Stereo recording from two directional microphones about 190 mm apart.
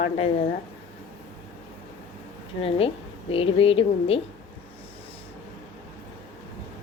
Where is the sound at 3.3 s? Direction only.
30° left (ahead or behind).